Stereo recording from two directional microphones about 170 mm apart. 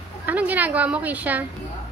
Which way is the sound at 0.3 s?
10° right (ahead or behind).